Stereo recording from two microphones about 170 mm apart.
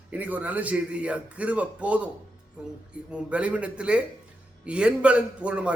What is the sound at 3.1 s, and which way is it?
A man's voice, 5° right (ahead or behind).